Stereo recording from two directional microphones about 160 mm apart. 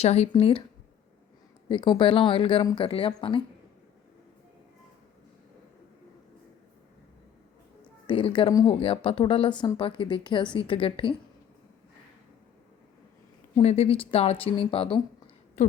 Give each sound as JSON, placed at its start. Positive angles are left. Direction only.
{"t": 0.0, "sound": "speech", "side_deg": 40}
{"t": 1.7, "sound": "speech", "side_deg": 30}
{"t": 8.0, "sound": "speech", "side_deg": 30}
{"t": 13.6, "sound": "speech", "side_deg": 40}
{"t": 15.6, "sound": "a sound", "side_deg": 45}